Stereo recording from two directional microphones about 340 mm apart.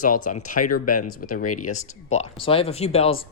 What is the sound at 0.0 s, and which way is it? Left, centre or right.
Speech, left.